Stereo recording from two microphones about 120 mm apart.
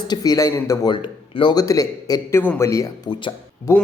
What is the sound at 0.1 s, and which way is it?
Speech, 30° left (ahead or behind).